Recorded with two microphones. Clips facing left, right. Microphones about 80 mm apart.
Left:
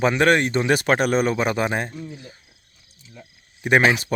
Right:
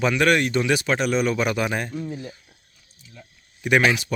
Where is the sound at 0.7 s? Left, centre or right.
Left.